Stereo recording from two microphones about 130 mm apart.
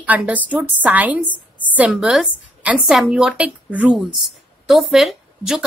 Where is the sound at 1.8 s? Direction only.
5° right (ahead or behind).